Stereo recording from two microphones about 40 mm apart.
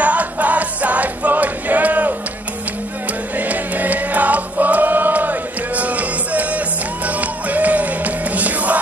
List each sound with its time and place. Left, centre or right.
0.0 s music: right
3.3 s music: right